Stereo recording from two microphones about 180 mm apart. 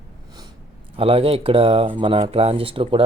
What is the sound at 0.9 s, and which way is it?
Speech, 30° right (ahead or behind).